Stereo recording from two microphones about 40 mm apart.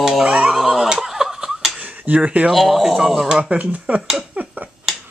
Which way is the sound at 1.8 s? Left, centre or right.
Right.